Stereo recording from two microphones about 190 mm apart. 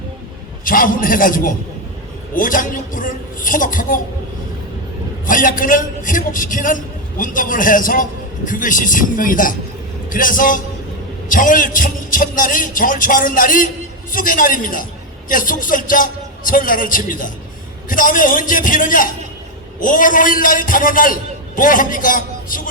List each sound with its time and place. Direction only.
0.6 s a man's voice: 45° left (ahead or behind)
5.2 s a man's voice: 45° left (ahead or behind)